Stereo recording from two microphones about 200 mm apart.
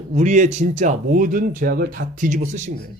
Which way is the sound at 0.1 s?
35° right (ahead or behind).